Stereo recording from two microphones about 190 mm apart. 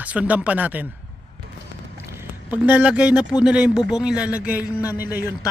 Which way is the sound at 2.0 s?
10° right (ahead or behind).